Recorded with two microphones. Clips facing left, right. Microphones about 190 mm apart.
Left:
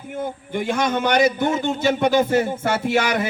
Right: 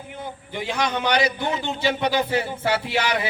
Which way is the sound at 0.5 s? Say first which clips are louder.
Left 4 dB; 50° left (ahead or behind).